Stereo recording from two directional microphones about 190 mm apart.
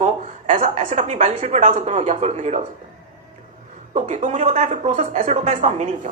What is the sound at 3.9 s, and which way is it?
Speech, 35° right (ahead or behind).